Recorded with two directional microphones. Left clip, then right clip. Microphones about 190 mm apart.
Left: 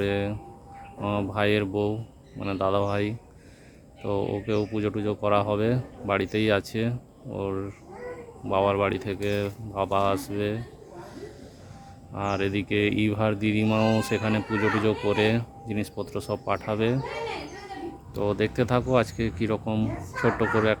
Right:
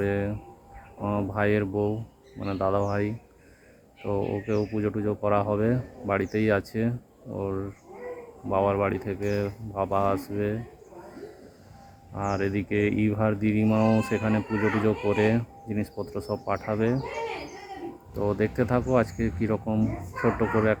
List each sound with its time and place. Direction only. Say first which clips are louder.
0.0 s speech: left 1 dB; 10° left (ahead or behind)
12.1 s speech: left 1 dB; 10° left (ahead or behind)
17.0 s speech: even; 35° left (ahead or behind)
18.2 s speech: left 1 dB; 10° left (ahead or behind)